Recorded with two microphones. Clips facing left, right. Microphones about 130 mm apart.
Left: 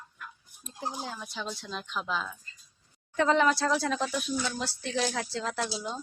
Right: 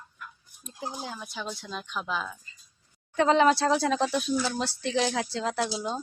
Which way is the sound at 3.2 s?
20° right (ahead or behind).